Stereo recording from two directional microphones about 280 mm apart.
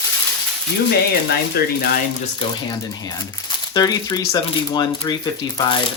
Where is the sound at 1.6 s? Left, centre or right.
Left.